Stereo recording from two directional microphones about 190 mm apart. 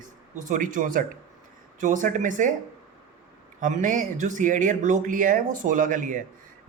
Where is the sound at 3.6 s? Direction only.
40° right (ahead or behind).